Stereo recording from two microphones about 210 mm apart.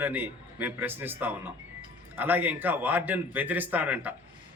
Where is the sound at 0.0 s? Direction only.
10° right (ahead or behind).